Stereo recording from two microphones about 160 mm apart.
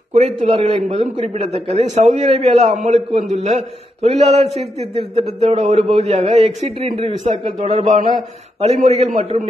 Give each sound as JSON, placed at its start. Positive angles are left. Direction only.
{"t": 0.1, "sound": "a man's voice", "side_deg": -40}